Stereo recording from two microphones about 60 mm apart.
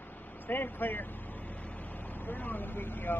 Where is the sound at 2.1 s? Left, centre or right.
Left.